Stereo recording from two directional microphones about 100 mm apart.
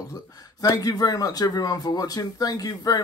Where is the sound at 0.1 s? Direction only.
35° left (ahead or behind).